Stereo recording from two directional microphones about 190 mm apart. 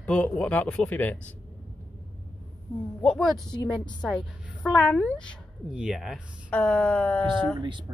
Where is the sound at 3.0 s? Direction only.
Centre (ahead or behind).